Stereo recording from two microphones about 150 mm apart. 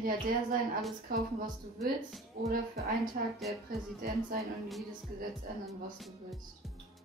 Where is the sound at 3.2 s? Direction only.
70° right (ahead or behind).